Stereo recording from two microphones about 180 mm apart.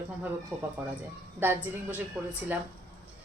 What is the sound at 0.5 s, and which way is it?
A woman's voice, 10° right (ahead or behind).